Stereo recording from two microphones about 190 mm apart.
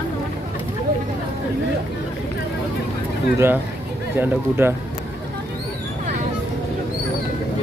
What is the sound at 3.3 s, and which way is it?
Speech, 15° right (ahead or behind).